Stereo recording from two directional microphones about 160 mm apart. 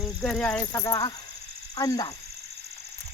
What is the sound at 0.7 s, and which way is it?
Speech, 20° left (ahead or behind).